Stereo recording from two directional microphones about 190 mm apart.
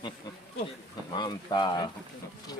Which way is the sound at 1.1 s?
25° left (ahead or behind).